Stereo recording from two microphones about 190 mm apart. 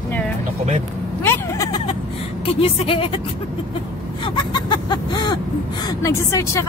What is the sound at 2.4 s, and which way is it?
Speech, 30° left (ahead or behind).